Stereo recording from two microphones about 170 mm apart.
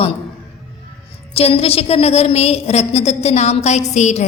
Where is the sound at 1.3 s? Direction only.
35° left (ahead or behind).